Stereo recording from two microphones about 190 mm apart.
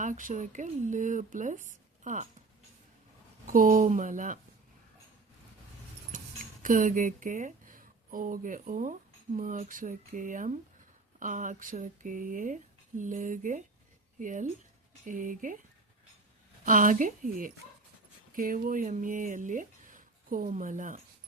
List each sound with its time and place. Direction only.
0.0 s speech: 45° right (ahead or behind)
3.4 s speech: 45° right (ahead or behind)
6.1 s speech: 45° right (ahead or behind)
16.6 s speech: 45° right (ahead or behind)